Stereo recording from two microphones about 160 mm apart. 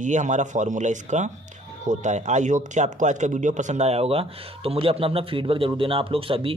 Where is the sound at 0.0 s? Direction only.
50° right (ahead or behind).